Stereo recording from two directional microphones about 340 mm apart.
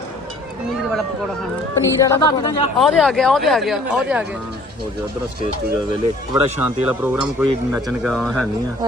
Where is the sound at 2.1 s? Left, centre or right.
Centre.